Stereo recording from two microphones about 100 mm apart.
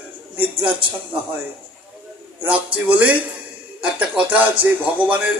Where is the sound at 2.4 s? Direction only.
15° right (ahead or behind).